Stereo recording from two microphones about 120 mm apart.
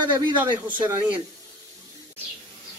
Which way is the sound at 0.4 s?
15° right (ahead or behind).